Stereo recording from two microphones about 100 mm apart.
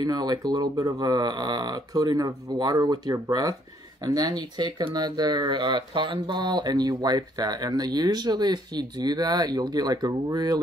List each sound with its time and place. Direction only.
0.0 s speech: 45° right (ahead or behind)